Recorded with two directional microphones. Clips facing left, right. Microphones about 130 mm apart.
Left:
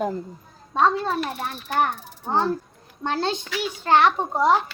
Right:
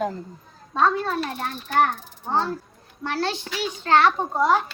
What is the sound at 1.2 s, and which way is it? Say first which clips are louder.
Speech: even; 5° left (ahead or behind).